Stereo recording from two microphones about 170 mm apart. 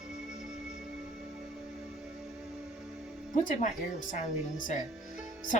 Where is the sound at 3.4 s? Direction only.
50° left (ahead or behind).